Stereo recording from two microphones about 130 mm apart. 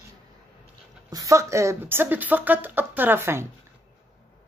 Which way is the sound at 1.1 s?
25° right (ahead or behind).